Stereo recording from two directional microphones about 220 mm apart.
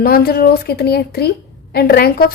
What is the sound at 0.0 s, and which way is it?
A woman's voice, 45° left (ahead or behind).